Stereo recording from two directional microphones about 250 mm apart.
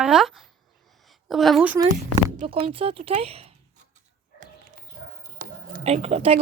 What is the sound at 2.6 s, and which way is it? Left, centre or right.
Speech, right.